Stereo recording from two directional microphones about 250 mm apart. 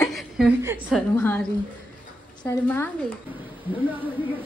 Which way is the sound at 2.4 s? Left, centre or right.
Centre.